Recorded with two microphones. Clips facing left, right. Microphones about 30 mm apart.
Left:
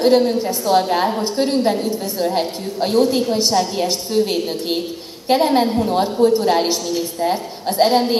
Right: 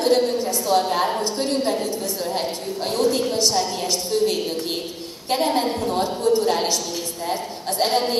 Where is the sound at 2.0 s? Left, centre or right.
Left.